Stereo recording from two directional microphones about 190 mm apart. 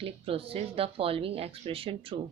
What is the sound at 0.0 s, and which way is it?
Speech, 30° right (ahead or behind).